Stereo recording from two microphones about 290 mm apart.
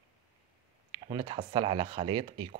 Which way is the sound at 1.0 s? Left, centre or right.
Centre.